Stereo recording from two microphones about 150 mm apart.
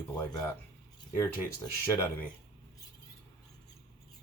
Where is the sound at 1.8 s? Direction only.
15° left (ahead or behind).